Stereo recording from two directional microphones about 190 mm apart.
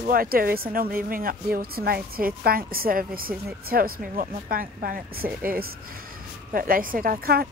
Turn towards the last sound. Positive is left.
turn(degrees=-50)  # may be behind; listen again after turning